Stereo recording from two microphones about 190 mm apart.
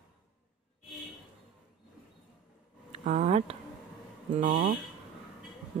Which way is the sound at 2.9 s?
40° right (ahead or behind).